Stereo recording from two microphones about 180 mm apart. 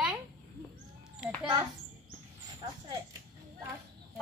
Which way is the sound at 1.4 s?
20° right (ahead or behind).